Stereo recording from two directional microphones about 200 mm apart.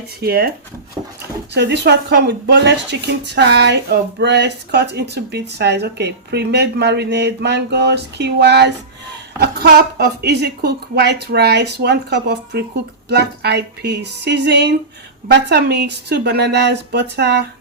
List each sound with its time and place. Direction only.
0.2 s speech: 50° right (ahead or behind)
1.0 s dog: 20° right (ahead or behind)
1.5 s speech: 60° right (ahead or behind)